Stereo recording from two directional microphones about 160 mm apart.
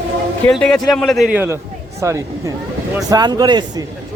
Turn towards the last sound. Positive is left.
turn(degrees=-25)  # may be behind; listen again after turning